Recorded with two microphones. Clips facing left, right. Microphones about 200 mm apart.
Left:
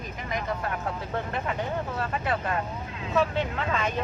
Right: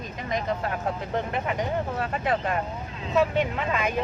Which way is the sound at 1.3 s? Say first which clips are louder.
Right 2 dB; 15° right (ahead or behind).